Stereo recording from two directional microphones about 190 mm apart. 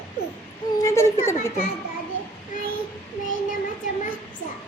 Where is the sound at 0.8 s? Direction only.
15° left (ahead or behind).